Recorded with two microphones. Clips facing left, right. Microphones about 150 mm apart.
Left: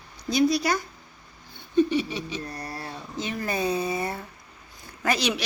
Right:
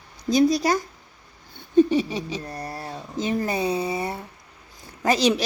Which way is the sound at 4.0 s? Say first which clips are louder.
Right 1 dB; 15° right (ahead or behind).